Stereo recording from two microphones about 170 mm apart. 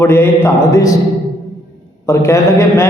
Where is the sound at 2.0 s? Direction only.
15° left (ahead or behind).